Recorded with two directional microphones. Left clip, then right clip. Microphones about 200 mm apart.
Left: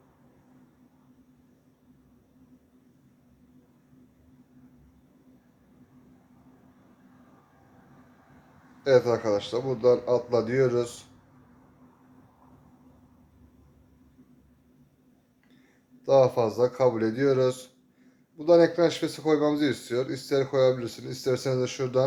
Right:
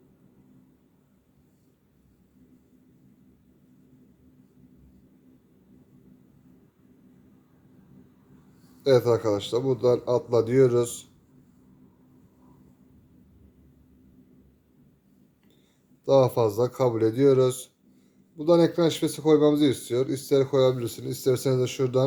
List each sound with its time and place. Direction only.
8.8 s speech: 45° right (ahead or behind)
16.0 s speech: 45° right (ahead or behind)